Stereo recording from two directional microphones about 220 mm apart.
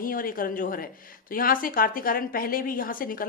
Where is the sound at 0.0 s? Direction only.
40° left (ahead or behind).